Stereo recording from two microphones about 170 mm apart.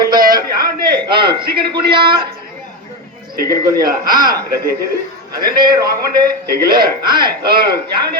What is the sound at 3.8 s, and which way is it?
Speech, 55° right (ahead or behind).